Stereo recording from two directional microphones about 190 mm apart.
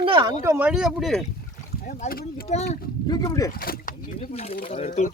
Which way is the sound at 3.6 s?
50° left (ahead or behind).